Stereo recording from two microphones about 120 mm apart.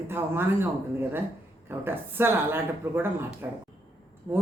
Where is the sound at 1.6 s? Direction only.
20° right (ahead or behind).